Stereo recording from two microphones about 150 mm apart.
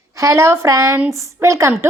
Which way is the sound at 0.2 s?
20° right (ahead or behind).